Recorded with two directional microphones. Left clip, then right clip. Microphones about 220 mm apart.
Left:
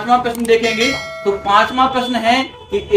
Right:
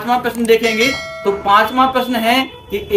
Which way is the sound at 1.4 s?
20° right (ahead or behind).